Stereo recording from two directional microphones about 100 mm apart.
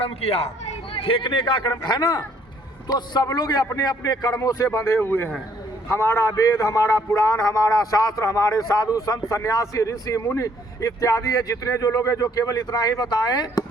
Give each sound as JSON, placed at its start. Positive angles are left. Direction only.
{"t": 0.0, "sound": "speech", "side_deg": 90}
{"t": 1.0, "sound": "a man's voice", "side_deg": 65}